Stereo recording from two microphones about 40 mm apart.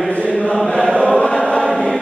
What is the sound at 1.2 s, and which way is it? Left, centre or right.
Choir, left.